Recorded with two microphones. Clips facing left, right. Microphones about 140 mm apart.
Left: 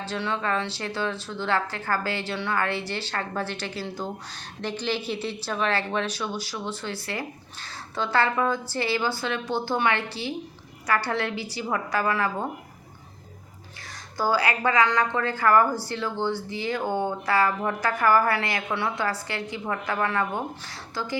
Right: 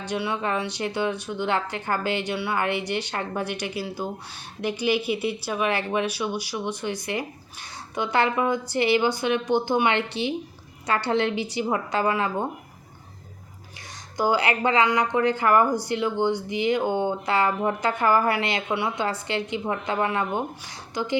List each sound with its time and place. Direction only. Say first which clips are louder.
0.0 s speech: right 2 dB; 15° right (ahead or behind)
14.2 s speech: right 2 dB; 20° right (ahead or behind)